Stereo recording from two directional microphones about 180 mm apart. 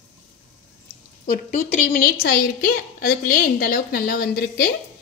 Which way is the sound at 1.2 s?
45° left (ahead or behind).